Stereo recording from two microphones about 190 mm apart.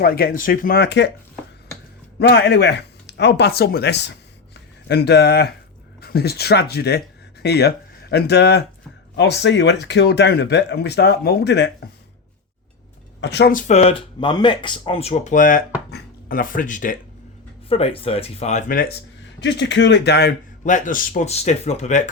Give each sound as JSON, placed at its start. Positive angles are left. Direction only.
{"t": 0.0, "sound": "speech", "side_deg": 50}
{"t": 2.1, "sound": "speech", "side_deg": 60}
{"t": 13.2, "sound": "speech", "side_deg": 65}
{"t": 13.5, "sound": "speech", "side_deg": 40}
{"t": 17.7, "sound": "speech", "side_deg": 30}
{"t": 19.4, "sound": "speech", "side_deg": 65}
{"t": 20.7, "sound": "speech", "side_deg": 40}